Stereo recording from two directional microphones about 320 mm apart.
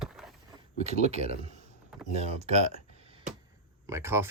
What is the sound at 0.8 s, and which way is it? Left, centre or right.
Speech, right.